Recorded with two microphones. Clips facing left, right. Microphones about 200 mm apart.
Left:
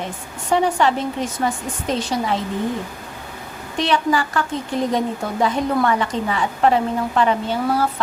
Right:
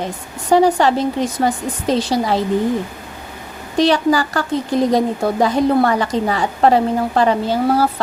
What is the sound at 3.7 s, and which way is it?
A woman's voice, 35° right (ahead or behind).